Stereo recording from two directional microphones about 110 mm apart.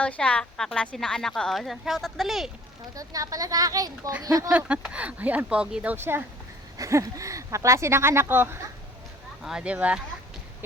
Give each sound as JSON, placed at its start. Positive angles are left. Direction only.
{"t": 0.0, "sound": "speech", "side_deg": 10}
{"t": 2.9, "sound": "speech", "side_deg": -30}
{"t": 4.5, "sound": "speech", "side_deg": -10}
{"t": 6.7, "sound": "speech", "side_deg": -30}
{"t": 9.4, "sound": "speech", "side_deg": -5}